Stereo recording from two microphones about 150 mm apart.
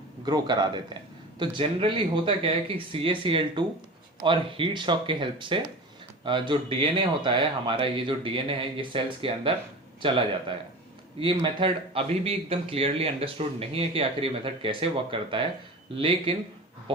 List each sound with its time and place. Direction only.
0.3 s a man's voice: 30° right (ahead or behind)